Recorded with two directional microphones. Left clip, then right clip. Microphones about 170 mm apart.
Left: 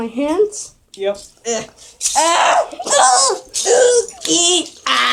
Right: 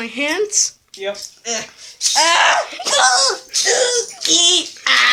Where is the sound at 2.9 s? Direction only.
10° left (ahead or behind).